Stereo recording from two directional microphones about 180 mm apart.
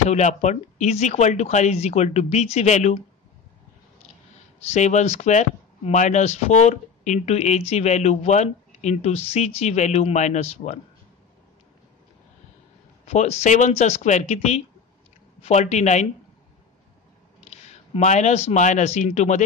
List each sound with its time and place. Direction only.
0.1 s speech: 40° left (ahead or behind)
4.6 s speech: 40° left (ahead or behind)
13.0 s speech: 40° left (ahead or behind)
17.5 s speech: 40° left (ahead or behind)